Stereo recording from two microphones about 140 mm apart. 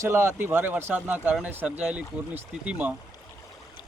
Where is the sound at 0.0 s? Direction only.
20° right (ahead or behind).